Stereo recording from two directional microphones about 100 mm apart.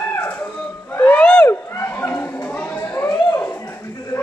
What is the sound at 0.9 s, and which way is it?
Music, 15° left (ahead or behind).